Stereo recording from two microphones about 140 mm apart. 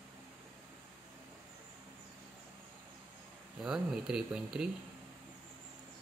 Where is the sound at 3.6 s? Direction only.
5° right (ahead or behind).